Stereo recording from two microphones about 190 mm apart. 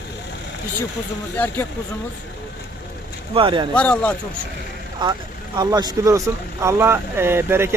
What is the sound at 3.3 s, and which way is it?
Speech, 25° right (ahead or behind).